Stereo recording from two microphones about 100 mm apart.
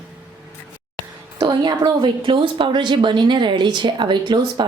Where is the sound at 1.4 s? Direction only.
45° right (ahead or behind).